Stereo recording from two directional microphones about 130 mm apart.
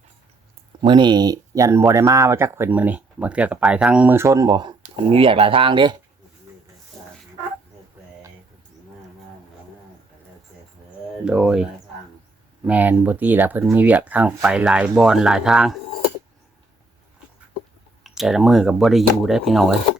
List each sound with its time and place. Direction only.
0.8 s speech: 35° right (ahead or behind)
5.0 s speech: 45° right (ahead or behind)
11.3 s speech: 5° right (ahead or behind)
18.0 s speech: 5° right (ahead or behind)